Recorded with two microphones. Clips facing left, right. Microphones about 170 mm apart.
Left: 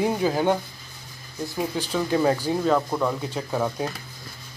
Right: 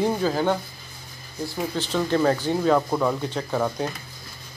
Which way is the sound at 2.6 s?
5° right (ahead or behind).